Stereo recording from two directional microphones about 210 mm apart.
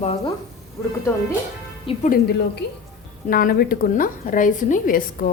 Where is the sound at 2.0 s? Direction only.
40° left (ahead or behind).